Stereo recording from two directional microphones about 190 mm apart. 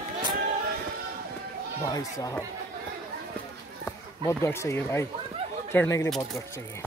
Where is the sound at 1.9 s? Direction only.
20° left (ahead or behind).